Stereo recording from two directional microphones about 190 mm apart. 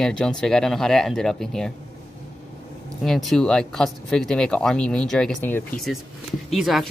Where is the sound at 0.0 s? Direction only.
5° left (ahead or behind).